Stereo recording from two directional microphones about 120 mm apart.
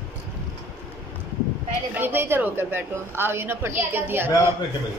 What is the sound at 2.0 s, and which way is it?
A woman's voice, 20° right (ahead or behind).